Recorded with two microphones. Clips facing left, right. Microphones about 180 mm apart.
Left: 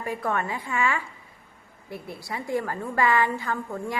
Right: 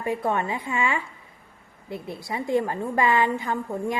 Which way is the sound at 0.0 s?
25° right (ahead or behind).